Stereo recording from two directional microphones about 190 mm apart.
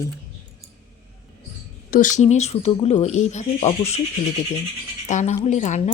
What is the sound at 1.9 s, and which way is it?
Speech, 40° left (ahead or behind).